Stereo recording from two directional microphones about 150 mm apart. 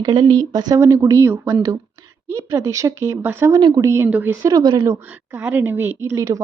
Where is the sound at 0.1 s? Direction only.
30° right (ahead or behind).